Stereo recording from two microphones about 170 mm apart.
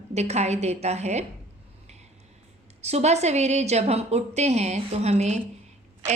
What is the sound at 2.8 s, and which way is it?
A woman's voice, 40° right (ahead or behind).